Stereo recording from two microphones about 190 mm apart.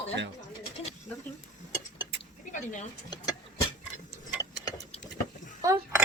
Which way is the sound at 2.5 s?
40° left (ahead or behind).